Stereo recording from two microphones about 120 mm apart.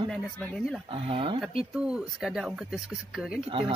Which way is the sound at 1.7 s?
5° right (ahead or behind).